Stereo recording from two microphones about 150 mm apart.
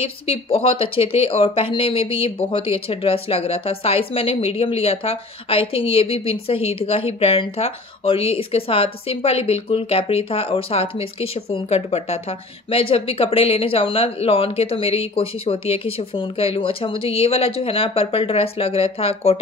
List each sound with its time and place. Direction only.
0.0 s speech: 40° left (ahead or behind)